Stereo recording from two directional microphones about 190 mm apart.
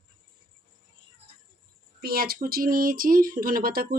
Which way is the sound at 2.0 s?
55° right (ahead or behind).